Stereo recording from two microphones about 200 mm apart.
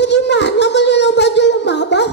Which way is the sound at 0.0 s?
60° left (ahead or behind).